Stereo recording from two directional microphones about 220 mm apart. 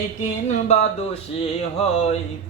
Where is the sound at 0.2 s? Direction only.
30° left (ahead or behind).